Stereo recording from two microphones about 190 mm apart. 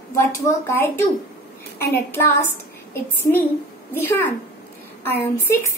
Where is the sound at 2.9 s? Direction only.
10° left (ahead or behind).